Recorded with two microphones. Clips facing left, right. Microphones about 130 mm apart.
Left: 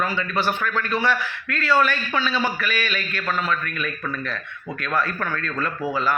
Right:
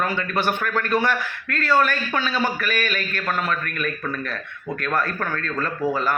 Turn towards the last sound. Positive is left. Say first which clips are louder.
# right 1 dB
turn(degrees=-45)  # may be behind; listen again after turning